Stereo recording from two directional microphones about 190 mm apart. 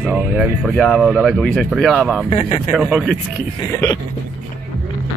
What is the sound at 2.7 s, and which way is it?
Speech, 5° right (ahead or behind).